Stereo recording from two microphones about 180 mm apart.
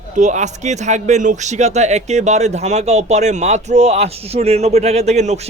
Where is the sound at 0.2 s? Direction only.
40° right (ahead or behind).